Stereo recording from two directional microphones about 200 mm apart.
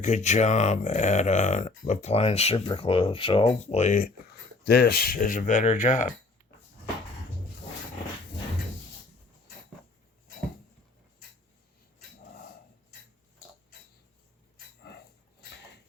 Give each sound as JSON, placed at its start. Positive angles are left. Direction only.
{"t": 0.0, "sound": "speech", "side_deg": 35}
{"t": 4.6, "sound": "speech", "side_deg": 55}
{"t": 14.8, "sound": "dog", "side_deg": 55}